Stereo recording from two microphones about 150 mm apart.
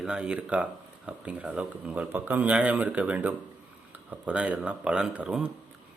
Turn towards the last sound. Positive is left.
turn(degrees=-5)  # may be behind; listen again after turning